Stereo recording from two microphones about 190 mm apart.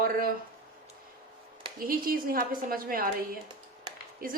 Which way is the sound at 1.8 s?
50° right (ahead or behind).